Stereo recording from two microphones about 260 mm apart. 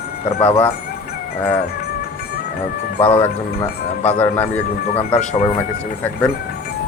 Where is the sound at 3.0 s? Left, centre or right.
Centre.